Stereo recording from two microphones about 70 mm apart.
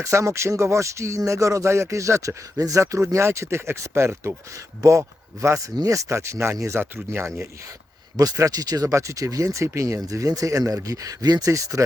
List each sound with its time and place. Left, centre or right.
0.0 s speech: right
5.7 s speech: right
6.1 s speech: right
8.1 s speech: right
10.1 s speech: right